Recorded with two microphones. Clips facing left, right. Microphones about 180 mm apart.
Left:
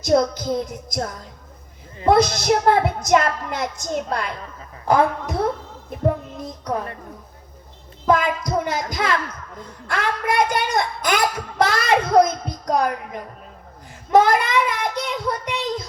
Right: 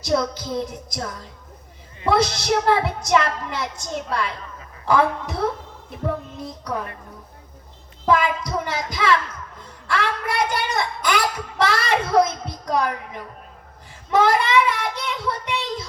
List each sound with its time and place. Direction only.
0.0 s speech: 45° left (ahead or behind)
2.0 s speech: 50° left (ahead or behind)
8.0 s speech: 45° left (ahead or behind)
14.1 s child singing: 45° left (ahead or behind)